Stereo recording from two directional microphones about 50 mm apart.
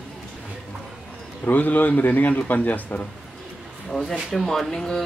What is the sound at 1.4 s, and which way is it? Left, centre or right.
A man's voice, left.